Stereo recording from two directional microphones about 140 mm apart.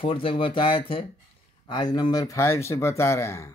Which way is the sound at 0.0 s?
40° left (ahead or behind).